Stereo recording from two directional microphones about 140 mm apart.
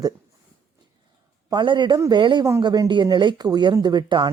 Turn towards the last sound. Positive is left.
turn(degrees=-35)  # may be behind; listen again after turning